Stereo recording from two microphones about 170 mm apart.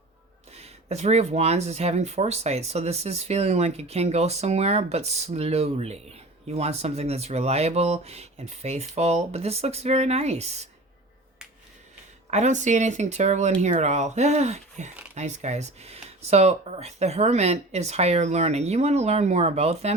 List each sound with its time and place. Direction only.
0.5 s speech: 40° right (ahead or behind)
12.3 s speech: 45° right (ahead or behind)